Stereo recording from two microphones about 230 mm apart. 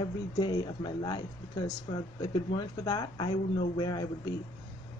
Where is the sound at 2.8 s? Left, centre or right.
Centre.